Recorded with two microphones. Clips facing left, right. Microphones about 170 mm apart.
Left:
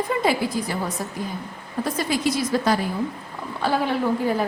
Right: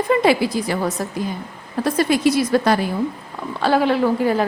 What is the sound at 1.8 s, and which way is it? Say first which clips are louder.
Speech: right 7 dB; 70° right (ahead or behind).